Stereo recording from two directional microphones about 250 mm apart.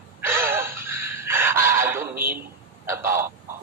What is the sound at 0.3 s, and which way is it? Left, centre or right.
Gasp, centre.